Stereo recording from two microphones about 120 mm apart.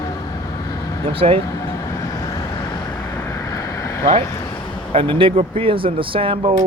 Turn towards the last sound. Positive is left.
turn(degrees=-50)  # may be behind; listen again after turning